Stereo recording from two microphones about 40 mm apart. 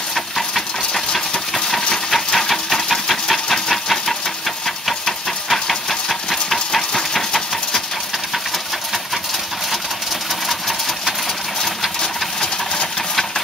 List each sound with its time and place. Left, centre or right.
0.1 s engine: centre
12.0 s engine: centre